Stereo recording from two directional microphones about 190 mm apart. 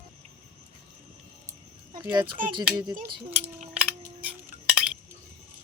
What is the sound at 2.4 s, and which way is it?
Speech, 45° right (ahead or behind).